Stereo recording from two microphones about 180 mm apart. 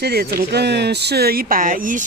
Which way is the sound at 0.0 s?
60° right (ahead or behind).